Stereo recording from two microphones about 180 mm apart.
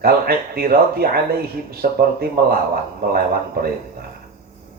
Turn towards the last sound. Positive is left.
turn(degrees=-55)  # may be behind; listen again after turning